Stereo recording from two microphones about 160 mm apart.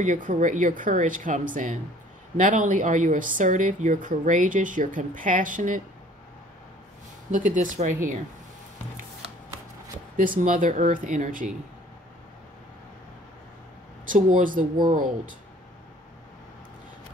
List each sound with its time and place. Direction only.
0.0 s speech: 55° right (ahead or behind)
7.2 s speech: 55° right (ahead or behind)
10.1 s speech: 60° right (ahead or behind)
14.0 s speech: 55° right (ahead or behind)